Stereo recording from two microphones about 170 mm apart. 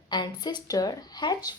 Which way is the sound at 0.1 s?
25° left (ahead or behind).